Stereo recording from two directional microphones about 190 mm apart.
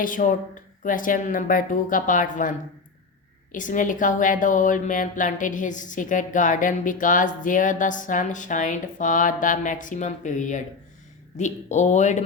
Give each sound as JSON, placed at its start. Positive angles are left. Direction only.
{"t": 0.0, "sound": "speech", "side_deg": 45}
{"t": 3.5, "sound": "speech", "side_deg": 45}